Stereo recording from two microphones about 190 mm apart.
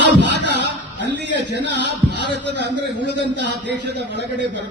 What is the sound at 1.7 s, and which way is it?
Music, 65° left (ahead or behind).